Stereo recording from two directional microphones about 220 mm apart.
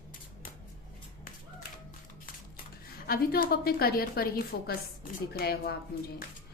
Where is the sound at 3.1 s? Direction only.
45° left (ahead or behind).